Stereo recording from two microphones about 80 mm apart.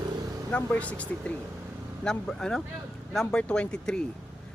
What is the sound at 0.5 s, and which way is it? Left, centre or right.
Speech, centre.